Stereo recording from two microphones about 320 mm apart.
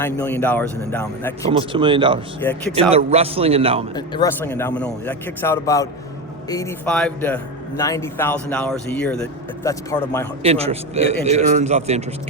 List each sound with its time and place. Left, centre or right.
0.0 s a man's voice: centre
1.5 s a man's voice: centre
3.9 s a man's voice: centre
10.4 s a man's voice: centre